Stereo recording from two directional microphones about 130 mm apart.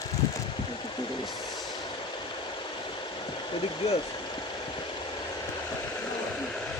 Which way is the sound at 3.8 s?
50° left (ahead or behind).